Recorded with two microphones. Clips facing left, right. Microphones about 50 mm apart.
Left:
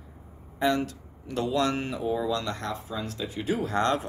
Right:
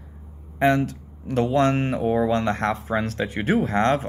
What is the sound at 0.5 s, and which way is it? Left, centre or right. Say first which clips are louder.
Speech: right 6 dB; right.